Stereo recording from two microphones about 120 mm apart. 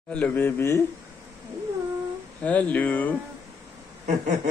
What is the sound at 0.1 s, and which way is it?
Speech, 15° left (ahead or behind).